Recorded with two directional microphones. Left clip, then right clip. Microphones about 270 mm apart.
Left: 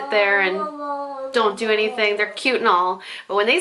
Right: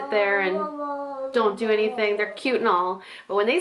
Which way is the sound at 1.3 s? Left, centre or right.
Centre.